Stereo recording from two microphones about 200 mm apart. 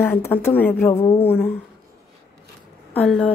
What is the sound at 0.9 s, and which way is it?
Speech, 30° left (ahead or behind).